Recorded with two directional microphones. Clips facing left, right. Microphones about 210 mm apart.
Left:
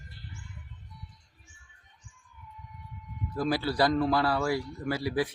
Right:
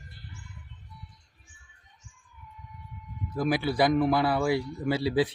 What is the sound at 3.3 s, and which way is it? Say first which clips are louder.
A man's voice: right 2 dB; 15° right (ahead or behind).